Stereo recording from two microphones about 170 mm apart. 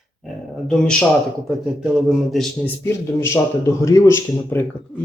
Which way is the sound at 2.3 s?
Centre (ahead or behind).